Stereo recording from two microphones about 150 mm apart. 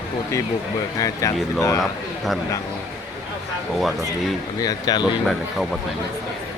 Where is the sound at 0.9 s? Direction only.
20° left (ahead or behind).